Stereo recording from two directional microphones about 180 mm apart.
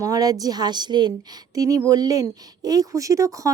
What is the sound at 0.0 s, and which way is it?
A woman's voice, 20° right (ahead or behind).